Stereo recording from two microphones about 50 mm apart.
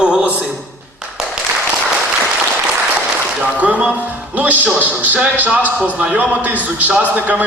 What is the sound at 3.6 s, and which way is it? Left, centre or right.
Speech, right.